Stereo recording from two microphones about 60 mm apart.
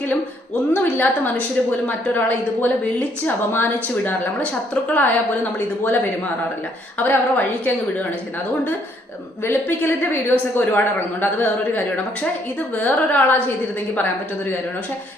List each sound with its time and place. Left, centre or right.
0.7 s a woman's voice: left
7.0 s a woman's voice: left
9.4 s a man's voice: left